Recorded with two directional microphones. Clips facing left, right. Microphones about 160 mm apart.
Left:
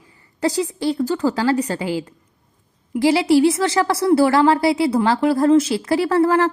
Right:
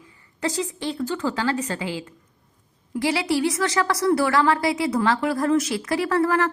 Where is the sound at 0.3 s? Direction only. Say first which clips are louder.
Left 6 dB; 35° left (ahead or behind).